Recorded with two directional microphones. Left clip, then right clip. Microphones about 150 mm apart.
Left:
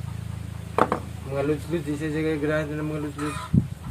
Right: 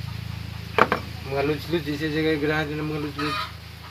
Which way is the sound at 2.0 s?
20° right (ahead or behind).